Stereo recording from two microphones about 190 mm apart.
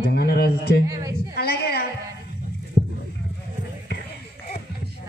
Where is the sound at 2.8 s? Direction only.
45° left (ahead or behind).